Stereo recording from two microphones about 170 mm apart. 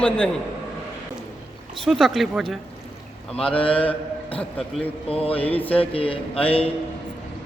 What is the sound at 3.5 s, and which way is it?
A man's voice, 30° left (ahead or behind).